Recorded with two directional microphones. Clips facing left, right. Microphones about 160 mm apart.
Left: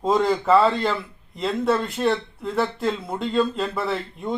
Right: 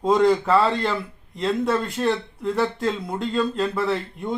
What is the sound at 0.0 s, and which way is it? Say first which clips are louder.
Speech: right 2 dB; centre (ahead or behind).